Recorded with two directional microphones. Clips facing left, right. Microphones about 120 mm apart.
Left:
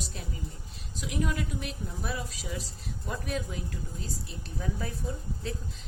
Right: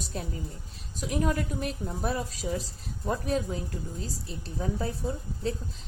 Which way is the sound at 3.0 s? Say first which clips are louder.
Right 6 dB; 35° right (ahead or behind).